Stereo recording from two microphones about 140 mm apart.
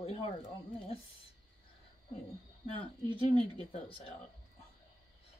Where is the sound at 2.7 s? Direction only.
40° left (ahead or behind).